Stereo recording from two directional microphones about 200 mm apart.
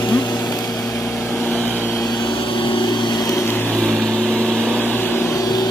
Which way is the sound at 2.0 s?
20° left (ahead or behind).